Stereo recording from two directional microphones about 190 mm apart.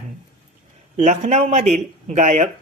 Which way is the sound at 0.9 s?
40° right (ahead or behind).